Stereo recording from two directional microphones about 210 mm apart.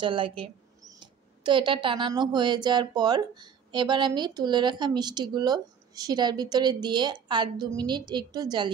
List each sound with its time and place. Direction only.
0.0 s speech: 25° right (ahead or behind)